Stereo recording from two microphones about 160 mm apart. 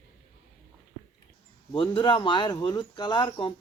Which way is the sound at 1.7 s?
30° left (ahead or behind).